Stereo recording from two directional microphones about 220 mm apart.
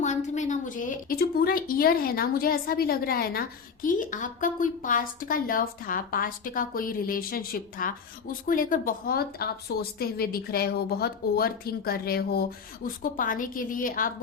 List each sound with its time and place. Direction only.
0.0 s a woman's voice: 35° left (ahead or behind)